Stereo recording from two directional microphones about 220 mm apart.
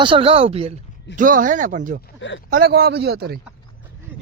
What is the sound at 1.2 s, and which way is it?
A man's voice, 40° right (ahead or behind).